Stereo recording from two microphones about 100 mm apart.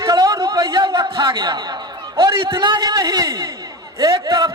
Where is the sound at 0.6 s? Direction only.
50° right (ahead or behind).